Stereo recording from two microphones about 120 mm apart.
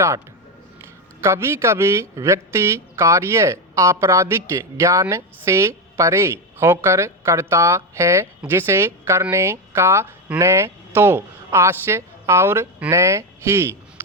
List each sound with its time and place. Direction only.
0.8 s speech: 20° right (ahead or behind)